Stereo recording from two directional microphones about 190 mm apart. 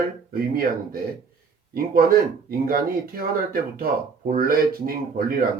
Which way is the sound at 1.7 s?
50° right (ahead or behind).